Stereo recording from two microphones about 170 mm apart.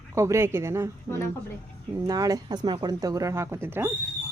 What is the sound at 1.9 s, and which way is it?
A woman's voice, 20° right (ahead or behind).